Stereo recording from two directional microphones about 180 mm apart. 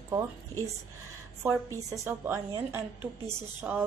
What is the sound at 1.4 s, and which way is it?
A woman's voice, 15° right (ahead or behind).